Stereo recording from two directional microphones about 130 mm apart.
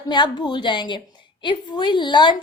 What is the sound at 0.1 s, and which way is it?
A woman's voice, 35° left (ahead or behind).